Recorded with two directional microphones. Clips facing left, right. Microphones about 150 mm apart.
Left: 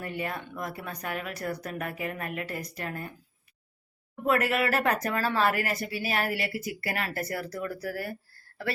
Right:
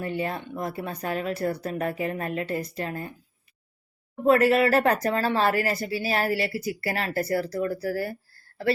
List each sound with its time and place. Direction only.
0.0 s speech: 30° right (ahead or behind)
4.1 s speech: 30° right (ahead or behind)